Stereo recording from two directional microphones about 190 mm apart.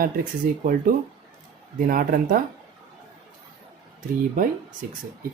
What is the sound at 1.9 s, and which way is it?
Speech, 50° right (ahead or behind).